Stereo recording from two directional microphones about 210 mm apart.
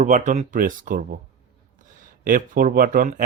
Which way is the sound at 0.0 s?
35° right (ahead or behind).